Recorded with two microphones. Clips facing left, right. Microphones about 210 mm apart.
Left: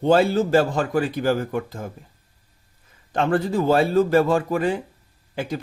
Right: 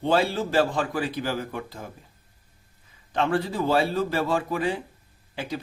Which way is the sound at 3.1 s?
45° left (ahead or behind).